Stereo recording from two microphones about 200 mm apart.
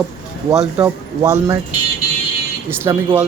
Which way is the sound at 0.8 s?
15° right (ahead or behind).